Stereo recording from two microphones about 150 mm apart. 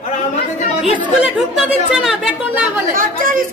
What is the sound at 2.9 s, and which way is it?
Speech, 65° right (ahead or behind).